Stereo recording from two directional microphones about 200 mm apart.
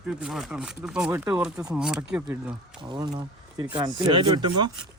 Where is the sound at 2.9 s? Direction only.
25° right (ahead or behind).